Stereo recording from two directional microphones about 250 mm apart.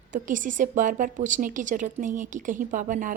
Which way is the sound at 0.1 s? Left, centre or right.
Right.